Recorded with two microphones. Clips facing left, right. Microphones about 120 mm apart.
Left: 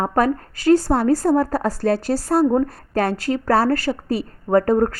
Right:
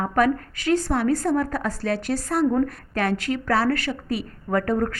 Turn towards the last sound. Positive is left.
turn(degrees=35)  # may be behind; listen again after turning